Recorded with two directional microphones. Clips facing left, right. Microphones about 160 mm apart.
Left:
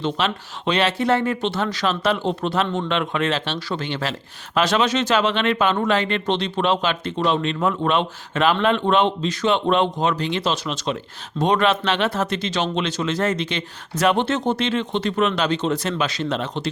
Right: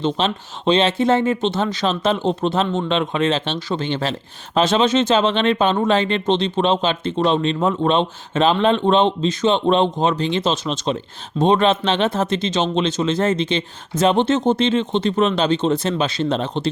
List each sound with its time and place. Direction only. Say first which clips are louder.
0.0 s speech: right 3 dB; 25° right (ahead or behind)